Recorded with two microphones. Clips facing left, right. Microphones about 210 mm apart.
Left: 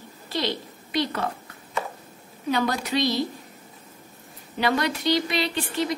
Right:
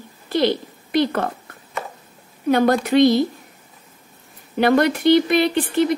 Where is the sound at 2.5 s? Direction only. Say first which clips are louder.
Right 8 dB; 55° right (ahead or behind).